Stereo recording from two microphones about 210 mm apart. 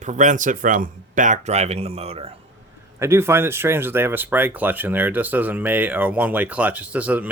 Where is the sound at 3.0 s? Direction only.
10° right (ahead or behind).